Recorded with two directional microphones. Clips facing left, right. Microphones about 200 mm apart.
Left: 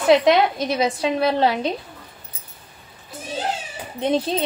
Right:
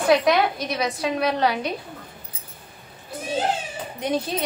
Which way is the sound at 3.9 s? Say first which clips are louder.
Left 4 dB; 30° left (ahead or behind).